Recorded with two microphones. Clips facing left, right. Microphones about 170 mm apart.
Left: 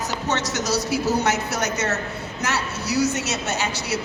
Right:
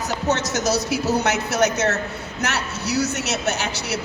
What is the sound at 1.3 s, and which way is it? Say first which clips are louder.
Speech: right 3 dB; 65° right (ahead or behind).